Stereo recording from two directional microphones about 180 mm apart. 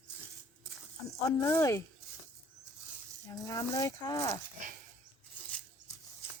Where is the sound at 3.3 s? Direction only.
20° left (ahead or behind).